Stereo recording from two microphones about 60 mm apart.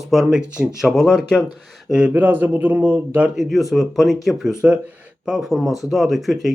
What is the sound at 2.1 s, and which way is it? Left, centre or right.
Speech, right.